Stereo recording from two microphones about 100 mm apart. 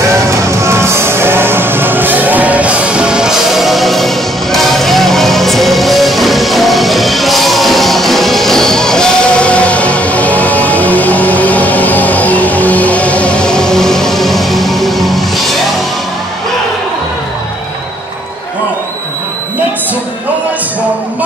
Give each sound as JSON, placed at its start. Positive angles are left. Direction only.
{"t": 0.1, "sound": "music", "side_deg": -30}